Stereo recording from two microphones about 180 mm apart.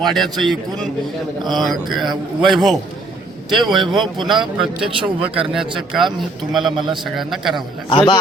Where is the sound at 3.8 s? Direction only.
25° right (ahead or behind).